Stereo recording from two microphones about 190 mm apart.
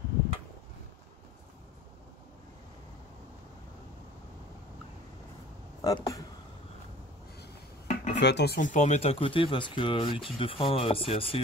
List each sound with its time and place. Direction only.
5.8 s speech: 20° left (ahead or behind)
7.9 s dishes: 40° left (ahead or behind)
8.2 s speech: 65° left (ahead or behind)
8.5 s speech: 40° left (ahead or behind)